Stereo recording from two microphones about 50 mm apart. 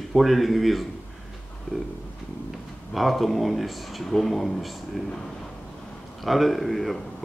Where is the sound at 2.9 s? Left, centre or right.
Centre.